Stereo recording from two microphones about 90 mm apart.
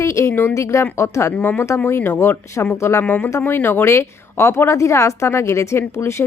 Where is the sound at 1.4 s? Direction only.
20° left (ahead or behind).